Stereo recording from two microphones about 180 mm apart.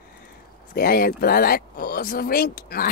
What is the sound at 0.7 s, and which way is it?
Speech, 55° left (ahead or behind).